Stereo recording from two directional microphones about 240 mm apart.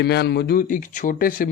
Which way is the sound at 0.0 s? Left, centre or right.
Left.